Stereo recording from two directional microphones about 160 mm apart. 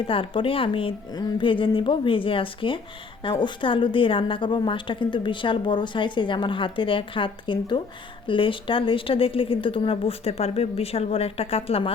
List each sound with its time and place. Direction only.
0.1 s a woman's voice: 35° left (ahead or behind)